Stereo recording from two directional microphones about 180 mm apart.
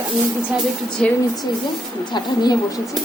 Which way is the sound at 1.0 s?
5° left (ahead or behind).